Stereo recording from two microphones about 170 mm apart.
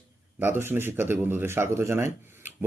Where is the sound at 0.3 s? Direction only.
10° right (ahead or behind).